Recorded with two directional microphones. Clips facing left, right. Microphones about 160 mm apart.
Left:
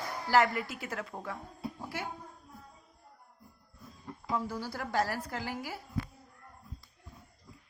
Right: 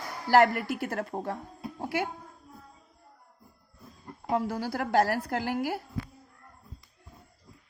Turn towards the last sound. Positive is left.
turn(degrees=-60)  # may be behind; listen again after turning